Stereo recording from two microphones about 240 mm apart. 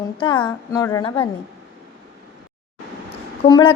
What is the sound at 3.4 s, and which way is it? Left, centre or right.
Speech, left.